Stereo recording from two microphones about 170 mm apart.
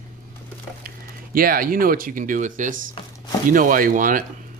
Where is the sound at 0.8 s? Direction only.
60° right (ahead or behind).